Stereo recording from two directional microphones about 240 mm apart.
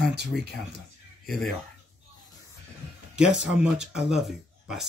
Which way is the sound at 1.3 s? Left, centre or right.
Centre.